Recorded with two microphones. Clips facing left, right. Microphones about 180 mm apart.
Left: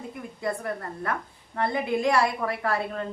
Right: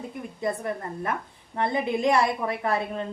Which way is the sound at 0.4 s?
20° right (ahead or behind).